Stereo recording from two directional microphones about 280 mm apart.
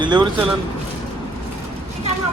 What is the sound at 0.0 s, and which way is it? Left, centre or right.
Speech, centre.